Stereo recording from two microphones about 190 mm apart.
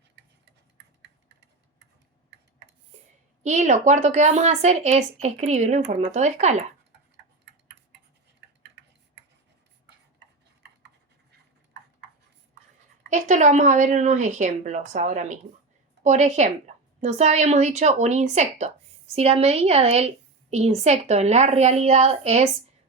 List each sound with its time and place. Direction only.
3.4 s speech: 40° right (ahead or behind)
13.1 s speech: 40° right (ahead or behind)